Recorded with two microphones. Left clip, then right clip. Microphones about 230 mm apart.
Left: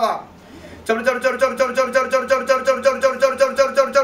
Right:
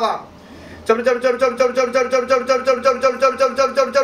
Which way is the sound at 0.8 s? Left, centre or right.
Left.